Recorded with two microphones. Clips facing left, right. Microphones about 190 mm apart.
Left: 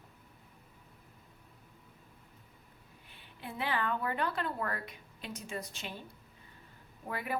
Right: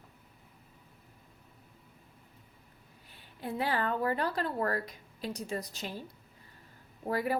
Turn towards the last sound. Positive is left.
turn(degrees=-35)  # may be behind; listen again after turning